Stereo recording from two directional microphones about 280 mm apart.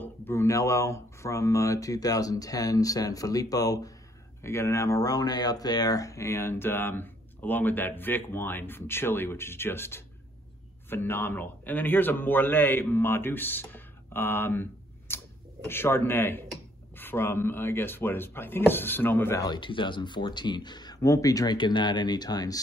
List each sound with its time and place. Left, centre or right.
0.0 s a man's voice: centre